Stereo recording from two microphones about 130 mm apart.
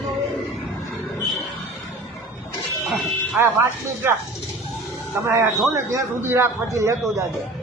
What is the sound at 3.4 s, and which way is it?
Speech, 15° right (ahead or behind).